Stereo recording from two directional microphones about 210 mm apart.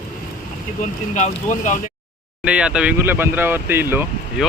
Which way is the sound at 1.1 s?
35° left (ahead or behind).